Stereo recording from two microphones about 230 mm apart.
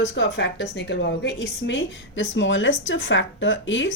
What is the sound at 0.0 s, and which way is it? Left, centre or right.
A woman's voice, left.